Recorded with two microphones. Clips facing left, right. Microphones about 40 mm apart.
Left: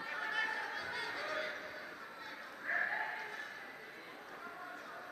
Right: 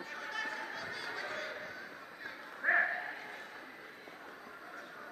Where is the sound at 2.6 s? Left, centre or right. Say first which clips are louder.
Right 8 dB; right.